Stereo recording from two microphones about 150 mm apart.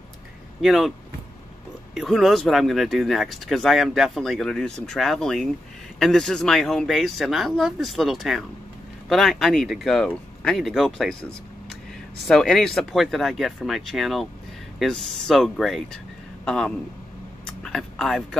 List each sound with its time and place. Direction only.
0.6 s speech: centre (ahead or behind)
2.0 s speech: centre (ahead or behind)
12.3 s speech: 5° left (ahead or behind)